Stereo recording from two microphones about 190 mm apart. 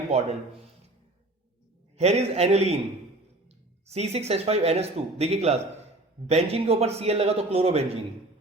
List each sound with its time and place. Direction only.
0.1 s speech: 35° right (ahead or behind)
2.0 s speech: 35° right (ahead or behind)
3.8 s speech: 35° right (ahead or behind)